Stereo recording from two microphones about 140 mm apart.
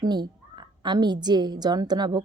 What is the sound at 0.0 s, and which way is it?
A woman's voice, 30° right (ahead or behind).